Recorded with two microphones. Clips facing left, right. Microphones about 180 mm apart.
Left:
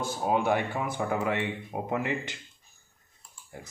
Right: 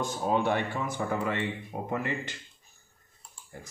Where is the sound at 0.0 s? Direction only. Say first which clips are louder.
Even; 10° left (ahead or behind).